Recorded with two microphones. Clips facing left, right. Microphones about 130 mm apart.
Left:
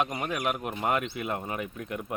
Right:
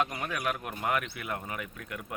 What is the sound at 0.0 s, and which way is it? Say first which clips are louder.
Speech: left 2 dB; 20° left (ahead or behind).